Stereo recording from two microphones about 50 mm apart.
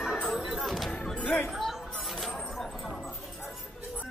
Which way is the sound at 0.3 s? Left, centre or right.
Centre.